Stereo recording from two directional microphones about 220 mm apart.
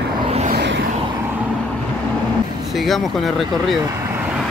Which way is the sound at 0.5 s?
50° right (ahead or behind).